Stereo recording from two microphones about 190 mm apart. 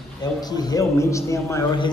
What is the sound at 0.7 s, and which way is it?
Speech, 15° left (ahead or behind).